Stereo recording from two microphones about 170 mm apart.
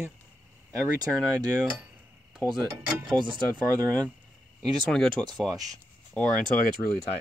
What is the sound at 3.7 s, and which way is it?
Speech, 20° right (ahead or behind).